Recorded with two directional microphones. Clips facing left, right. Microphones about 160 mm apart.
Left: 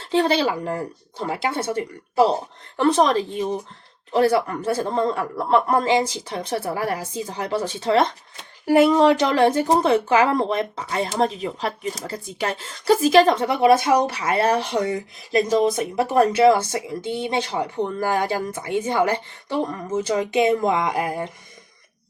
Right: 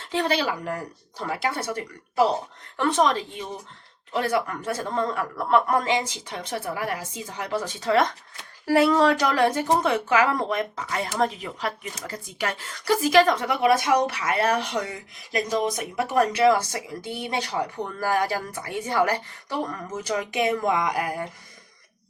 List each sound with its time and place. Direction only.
0.0 s speech: 30° left (ahead or behind)